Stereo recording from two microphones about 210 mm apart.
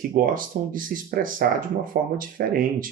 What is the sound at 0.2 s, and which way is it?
Speech, 40° right (ahead or behind).